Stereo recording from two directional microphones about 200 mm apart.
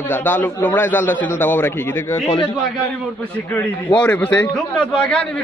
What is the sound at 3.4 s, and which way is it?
A man's voice, 10° left (ahead or behind).